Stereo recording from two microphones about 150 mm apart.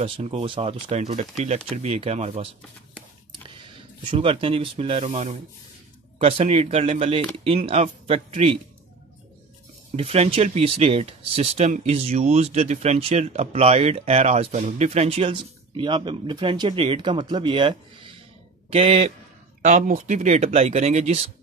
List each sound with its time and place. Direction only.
0.0 s speech: 40° right (ahead or behind)
4.0 s speech: 35° right (ahead or behind)
9.9 s speech: 40° right (ahead or behind)
19.6 s speech: 55° right (ahead or behind)